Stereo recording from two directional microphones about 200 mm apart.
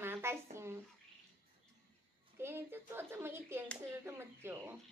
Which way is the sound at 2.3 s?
10° right (ahead or behind).